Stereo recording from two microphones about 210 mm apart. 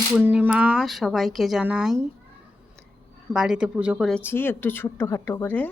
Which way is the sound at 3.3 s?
5° right (ahead or behind).